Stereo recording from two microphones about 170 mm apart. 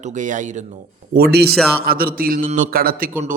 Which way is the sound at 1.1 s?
65° right (ahead or behind).